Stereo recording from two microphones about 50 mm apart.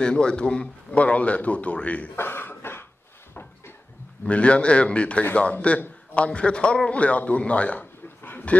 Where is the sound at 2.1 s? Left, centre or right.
Left.